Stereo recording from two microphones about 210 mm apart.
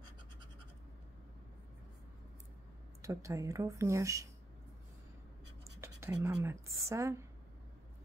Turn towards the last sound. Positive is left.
turn(degrees=-15)  # may be behind; listen again after turning